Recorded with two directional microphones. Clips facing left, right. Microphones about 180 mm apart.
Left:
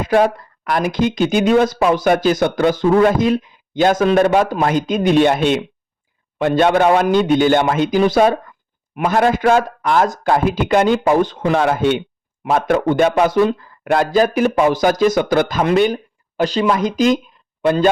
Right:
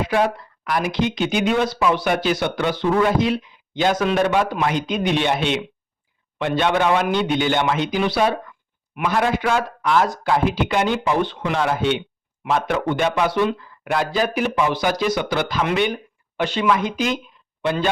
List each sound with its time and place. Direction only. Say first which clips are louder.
0.0 s speech: left 5 dB; 45° left (ahead or behind)